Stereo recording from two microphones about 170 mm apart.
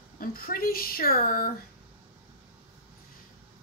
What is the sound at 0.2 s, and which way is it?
Speech, 55° left (ahead or behind).